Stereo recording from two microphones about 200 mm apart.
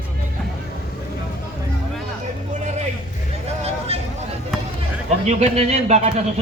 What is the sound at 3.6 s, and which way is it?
Vehicle, 30° right (ahead or behind).